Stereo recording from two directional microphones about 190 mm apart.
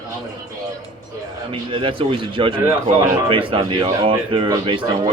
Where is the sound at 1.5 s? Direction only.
30° right (ahead or behind).